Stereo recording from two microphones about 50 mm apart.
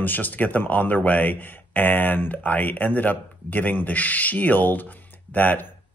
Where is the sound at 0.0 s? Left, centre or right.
Left.